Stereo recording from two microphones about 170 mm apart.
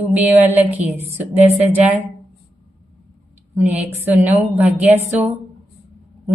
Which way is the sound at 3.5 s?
10° right (ahead or behind).